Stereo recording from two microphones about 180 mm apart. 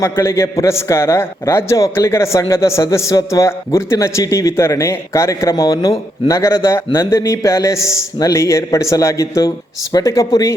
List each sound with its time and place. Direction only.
0.0 s a man's voice: 15° left (ahead or behind)